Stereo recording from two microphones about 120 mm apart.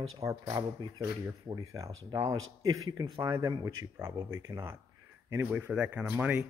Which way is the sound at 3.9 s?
20° right (ahead or behind).